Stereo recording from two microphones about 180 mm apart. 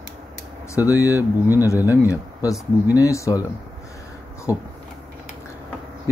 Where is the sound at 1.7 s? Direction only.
15° left (ahead or behind).